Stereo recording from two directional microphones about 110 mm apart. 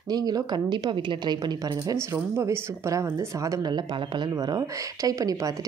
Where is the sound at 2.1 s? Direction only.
25° right (ahead or behind).